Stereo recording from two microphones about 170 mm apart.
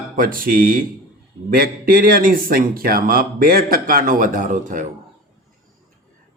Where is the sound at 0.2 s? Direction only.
55° right (ahead or behind).